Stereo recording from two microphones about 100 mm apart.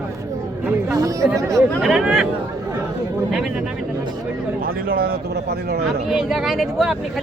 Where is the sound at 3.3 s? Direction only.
5° right (ahead or behind).